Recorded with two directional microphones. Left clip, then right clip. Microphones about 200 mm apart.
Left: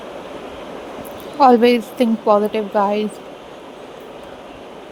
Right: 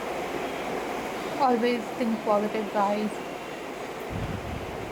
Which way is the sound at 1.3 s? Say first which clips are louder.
Left 13 dB; 45° left (ahead or behind).